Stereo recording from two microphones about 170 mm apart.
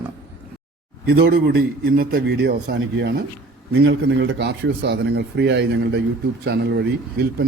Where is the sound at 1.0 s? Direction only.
70° right (ahead or behind).